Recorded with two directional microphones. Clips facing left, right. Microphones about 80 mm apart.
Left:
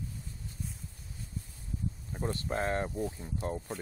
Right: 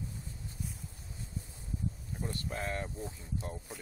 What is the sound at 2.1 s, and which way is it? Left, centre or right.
Speech, left.